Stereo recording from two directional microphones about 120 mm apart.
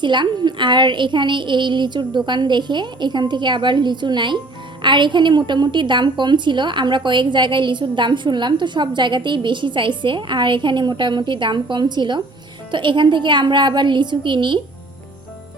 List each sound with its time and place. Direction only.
0.0 s a woman's voice: 40° right (ahead or behind)